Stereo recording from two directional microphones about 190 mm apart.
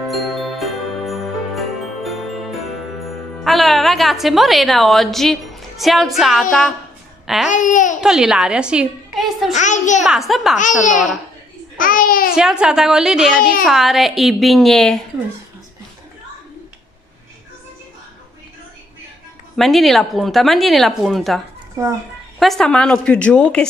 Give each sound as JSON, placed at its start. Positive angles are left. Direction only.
{"t": 0.1, "sound": "jingle bell", "side_deg": 0}
{"t": 7.4, "sound": "babbling", "side_deg": 40}
{"t": 8.0, "sound": "a woman's voice", "side_deg": -5}
{"t": 9.5, "sound": "a child's voice", "side_deg": 40}
{"t": 10.0, "sound": "speech", "side_deg": 0}
{"t": 10.6, "sound": "a child's voice", "side_deg": 40}
{"t": 12.4, "sound": "speech", "side_deg": -5}
{"t": 19.5, "sound": "speech", "side_deg": 0}
{"t": 21.8, "sound": "a child's voice", "side_deg": -15}
{"t": 22.4, "sound": "speech", "side_deg": 0}